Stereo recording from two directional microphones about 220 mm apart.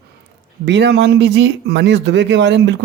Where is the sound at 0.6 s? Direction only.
50° right (ahead or behind).